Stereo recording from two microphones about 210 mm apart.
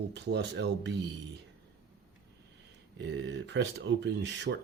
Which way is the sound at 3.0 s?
55° right (ahead or behind).